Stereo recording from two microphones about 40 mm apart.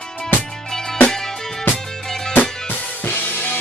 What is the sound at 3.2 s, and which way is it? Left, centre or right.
Drum kit, left.